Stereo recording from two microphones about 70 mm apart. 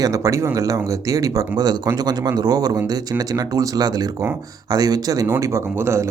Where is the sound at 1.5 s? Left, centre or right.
Right.